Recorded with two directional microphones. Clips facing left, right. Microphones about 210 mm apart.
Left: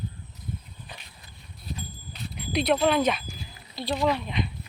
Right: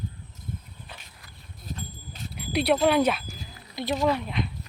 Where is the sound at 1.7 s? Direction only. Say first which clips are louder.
Even; 45° right (ahead or behind).